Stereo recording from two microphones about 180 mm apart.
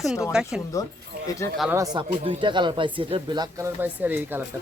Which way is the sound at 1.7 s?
20° right (ahead or behind).